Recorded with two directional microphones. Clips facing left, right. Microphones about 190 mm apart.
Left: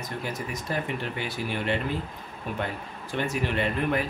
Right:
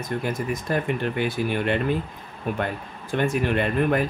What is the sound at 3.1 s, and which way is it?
Speech, 50° right (ahead or behind).